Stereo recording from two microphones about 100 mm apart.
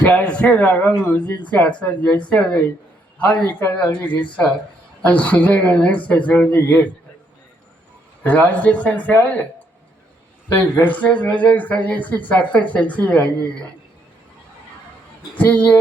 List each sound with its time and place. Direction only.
0.0 s a man's voice: 15° left (ahead or behind)
8.2 s speech: 15° left (ahead or behind)
10.6 s speech: 20° left (ahead or behind)
15.4 s speech: 15° left (ahead or behind)